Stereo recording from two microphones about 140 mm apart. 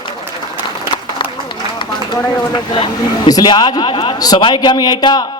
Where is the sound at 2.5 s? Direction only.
35° left (ahead or behind).